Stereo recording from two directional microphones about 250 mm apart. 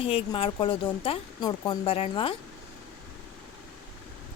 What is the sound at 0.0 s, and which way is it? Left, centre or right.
Speech, left.